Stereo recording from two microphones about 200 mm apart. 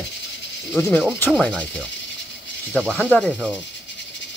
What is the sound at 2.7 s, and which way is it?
Speech, 5° left (ahead or behind).